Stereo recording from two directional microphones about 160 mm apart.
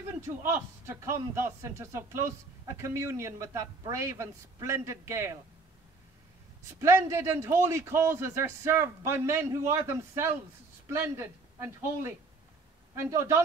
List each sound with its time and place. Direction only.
0.4 s a man's voice: 15° right (ahead or behind)
6.7 s a man's voice: 20° right (ahead or behind)